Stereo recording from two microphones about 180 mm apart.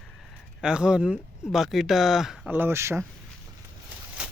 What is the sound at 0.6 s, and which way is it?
Speech, 5° right (ahead or behind).